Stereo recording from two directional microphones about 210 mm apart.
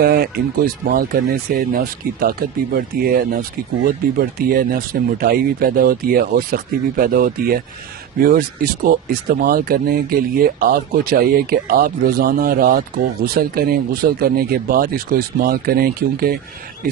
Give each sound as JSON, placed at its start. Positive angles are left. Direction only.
{"t": 0.0, "sound": "speech", "side_deg": -45}